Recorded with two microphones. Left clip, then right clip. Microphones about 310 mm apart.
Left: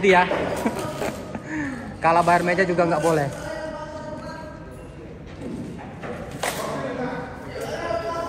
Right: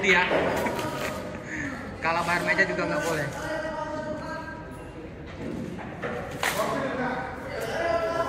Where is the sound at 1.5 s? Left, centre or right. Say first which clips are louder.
Left 5 dB; centre.